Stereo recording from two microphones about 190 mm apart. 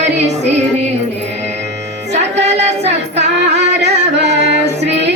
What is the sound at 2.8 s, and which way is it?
Music, 65° right (ahead or behind).